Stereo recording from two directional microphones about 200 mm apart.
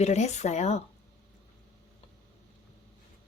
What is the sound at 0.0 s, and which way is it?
Speech, 35° left (ahead or behind).